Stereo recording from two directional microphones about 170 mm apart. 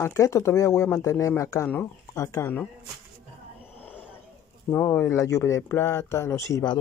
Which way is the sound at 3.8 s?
10° left (ahead or behind).